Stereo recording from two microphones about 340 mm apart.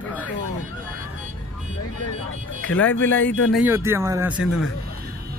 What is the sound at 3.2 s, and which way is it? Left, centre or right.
Speech, left.